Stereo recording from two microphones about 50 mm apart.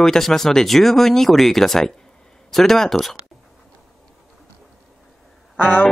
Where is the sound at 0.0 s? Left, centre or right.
Centre.